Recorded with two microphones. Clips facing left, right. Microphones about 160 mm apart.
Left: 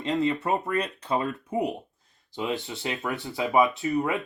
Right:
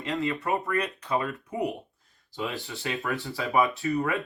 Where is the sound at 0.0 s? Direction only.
20° left (ahead or behind).